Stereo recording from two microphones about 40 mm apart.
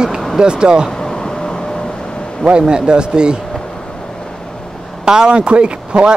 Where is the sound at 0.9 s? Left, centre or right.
Centre.